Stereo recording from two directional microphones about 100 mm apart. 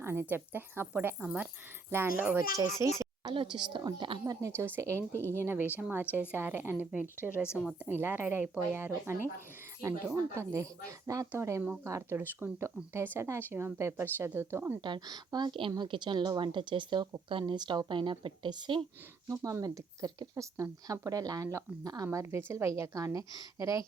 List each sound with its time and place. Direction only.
0.0 s speech: 20° right (ahead or behind)
1.9 s speech: 25° right (ahead or behind)
2.8 s a woman's voice: 50° left (ahead or behind)
3.2 s speech: 50° right (ahead or behind)
4.5 s speech: 20° right (ahead or behind)
7.5 s a woman's voice: 5° right (ahead or behind)
7.9 s speech: 20° right (ahead or behind)
14.8 s speech: 45° right (ahead or behind)
19.3 s speech: 30° right (ahead or behind)